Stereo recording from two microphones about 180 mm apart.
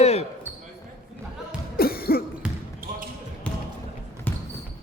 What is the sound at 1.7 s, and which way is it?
Cough, 55° left (ahead or behind).